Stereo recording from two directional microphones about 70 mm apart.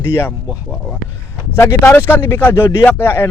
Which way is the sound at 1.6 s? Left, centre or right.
Left.